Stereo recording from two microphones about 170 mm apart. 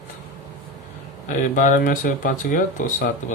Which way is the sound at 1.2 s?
50° left (ahead or behind).